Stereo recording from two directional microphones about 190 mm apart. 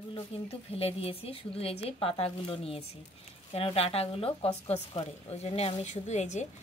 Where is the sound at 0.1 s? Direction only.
30° left (ahead or behind).